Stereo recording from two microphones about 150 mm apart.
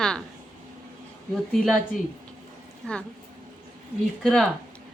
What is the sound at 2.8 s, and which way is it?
Speech, 5° left (ahead or behind).